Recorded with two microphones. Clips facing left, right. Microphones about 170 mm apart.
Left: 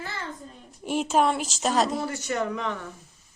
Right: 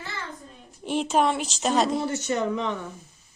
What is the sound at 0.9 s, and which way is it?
A woman's voice, 5° left (ahead or behind).